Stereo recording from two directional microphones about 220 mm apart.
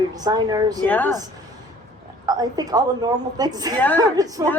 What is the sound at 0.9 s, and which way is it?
Speech, 10° left (ahead or behind).